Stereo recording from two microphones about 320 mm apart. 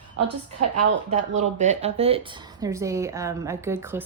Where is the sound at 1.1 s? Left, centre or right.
Right.